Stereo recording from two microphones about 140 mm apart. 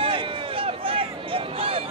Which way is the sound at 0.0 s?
40° right (ahead or behind).